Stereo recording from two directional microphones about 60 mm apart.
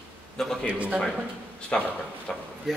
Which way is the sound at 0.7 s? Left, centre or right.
Right.